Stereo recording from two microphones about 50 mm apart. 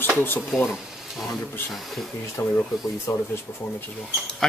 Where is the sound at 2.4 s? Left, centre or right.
Left.